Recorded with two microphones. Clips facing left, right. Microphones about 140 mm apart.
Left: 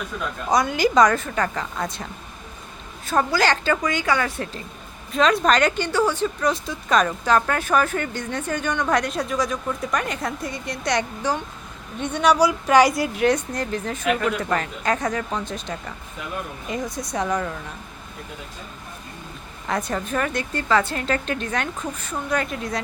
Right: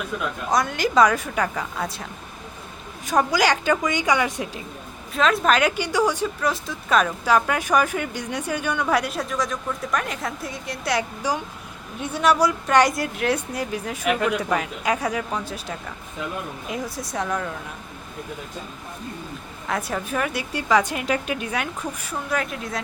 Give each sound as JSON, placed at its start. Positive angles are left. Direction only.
{"t": 0.5, "sound": "speech", "side_deg": 0}
{"t": 3.3, "sound": "a woman's voice", "side_deg": -10}
{"t": 5.1, "sound": "a woman's voice", "side_deg": 0}
{"t": 19.6, "sound": "a woman's voice", "side_deg": -5}